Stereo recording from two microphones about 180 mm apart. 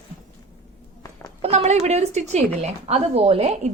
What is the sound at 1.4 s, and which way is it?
A woman's voice, 35° right (ahead or behind).